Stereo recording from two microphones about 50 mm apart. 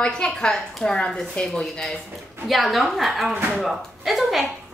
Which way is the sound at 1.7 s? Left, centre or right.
Centre.